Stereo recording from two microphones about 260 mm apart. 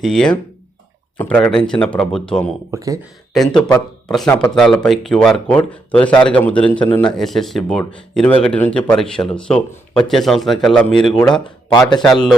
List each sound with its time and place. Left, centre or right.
0.0 s speech: centre
2.7 s speech: centre
3.3 s speech: centre
11.4 s speech: centre